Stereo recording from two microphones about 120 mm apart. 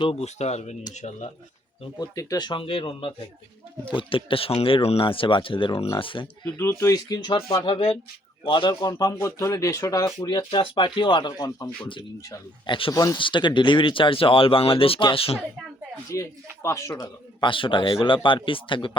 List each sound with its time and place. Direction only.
0.0 s speech: 55° left (ahead or behind); by 1.3 s 75° left (ahead or behind)
2.0 s speech: 30° left (ahead or behind)
2.5 s speech: 45° left (ahead or behind)
6.4 s speech: 20° left (ahead or behind); by 8.7 s 45° left (ahead or behind)
8.8 s speech: 30° left (ahead or behind)
10.2 s speech: 40° left (ahead or behind)
12.9 s speech: 30° left (ahead or behind)
13.1 s speech: 45° left (ahead or behind)
16.1 s speech: 25° left (ahead or behind)
17.4 s speech: 45° left (ahead or behind)